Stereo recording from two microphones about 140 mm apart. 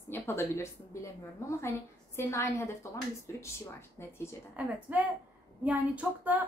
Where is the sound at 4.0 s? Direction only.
20° left (ahead or behind).